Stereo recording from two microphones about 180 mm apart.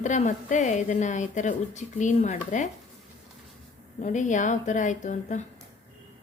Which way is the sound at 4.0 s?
45° left (ahead or behind).